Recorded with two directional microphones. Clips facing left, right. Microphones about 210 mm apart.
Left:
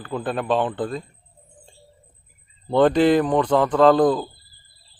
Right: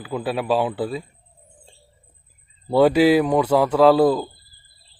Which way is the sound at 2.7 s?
5° right (ahead or behind).